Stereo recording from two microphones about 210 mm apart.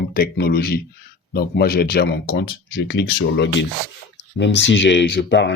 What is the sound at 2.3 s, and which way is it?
Speech, 70° left (ahead or behind).